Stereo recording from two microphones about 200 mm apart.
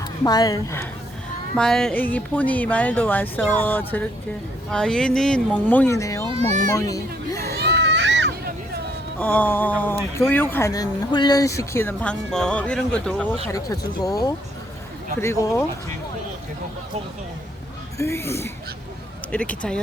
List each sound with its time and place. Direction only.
0.3 s speech: 20° left (ahead or behind)
1.5 s speech: 5° left (ahead or behind)
6.2 s a child's voice: 30° right (ahead or behind)
6.7 s a child's voice: 15° left (ahead or behind)
7.4 s children playing: 55° right (ahead or behind)
9.1 s speech: 10° left (ahead or behind)
13.5 s speech: 15° left (ahead or behind)
17.9 s speech: 15° left (ahead or behind)